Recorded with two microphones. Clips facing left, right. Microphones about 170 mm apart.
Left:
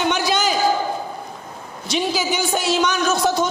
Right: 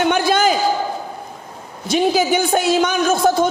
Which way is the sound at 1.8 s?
55° right (ahead or behind).